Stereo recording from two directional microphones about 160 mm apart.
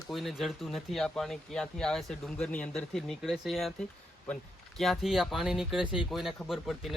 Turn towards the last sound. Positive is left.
turn(degrees=0)  # may be behind; listen again after turning